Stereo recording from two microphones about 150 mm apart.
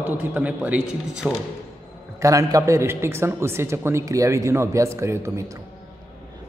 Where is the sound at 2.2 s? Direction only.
20° right (ahead or behind).